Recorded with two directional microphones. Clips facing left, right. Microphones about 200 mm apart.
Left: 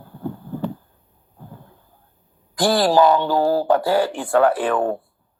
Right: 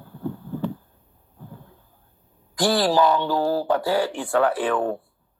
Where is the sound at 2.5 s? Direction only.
50° left (ahead or behind).